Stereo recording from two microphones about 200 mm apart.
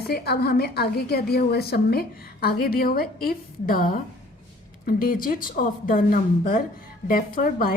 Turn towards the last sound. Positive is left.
turn(degrees=45)  # may be behind; listen again after turning